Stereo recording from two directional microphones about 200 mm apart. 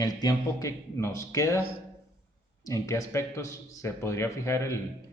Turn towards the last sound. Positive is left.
turn(degrees=15)  # may be behind; listen again after turning